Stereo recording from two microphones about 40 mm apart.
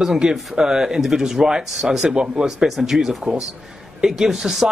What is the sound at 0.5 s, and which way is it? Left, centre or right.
Speech, centre.